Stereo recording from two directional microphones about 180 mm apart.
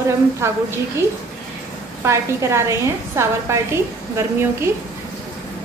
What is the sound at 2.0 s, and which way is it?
A woman's voice, 15° right (ahead or behind).